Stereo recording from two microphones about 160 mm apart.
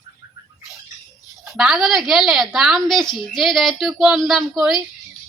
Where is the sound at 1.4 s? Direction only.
Centre (ahead or behind).